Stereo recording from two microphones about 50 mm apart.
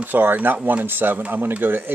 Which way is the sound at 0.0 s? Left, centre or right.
Right.